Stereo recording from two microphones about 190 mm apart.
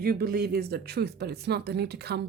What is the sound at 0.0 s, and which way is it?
Speech, 50° right (ahead or behind).